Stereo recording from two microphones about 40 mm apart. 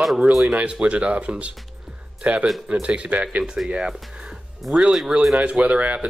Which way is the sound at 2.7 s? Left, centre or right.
Right.